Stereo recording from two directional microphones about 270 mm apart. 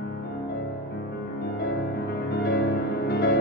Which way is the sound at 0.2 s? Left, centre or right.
Left.